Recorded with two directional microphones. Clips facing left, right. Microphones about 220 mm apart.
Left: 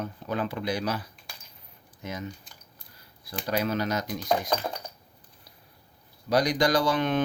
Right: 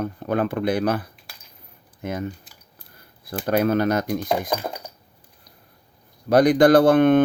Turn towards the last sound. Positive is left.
turn(degrees=-55)  # may be behind; listen again after turning